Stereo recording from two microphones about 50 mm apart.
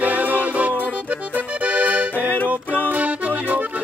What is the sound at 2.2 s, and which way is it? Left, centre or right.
Music, left.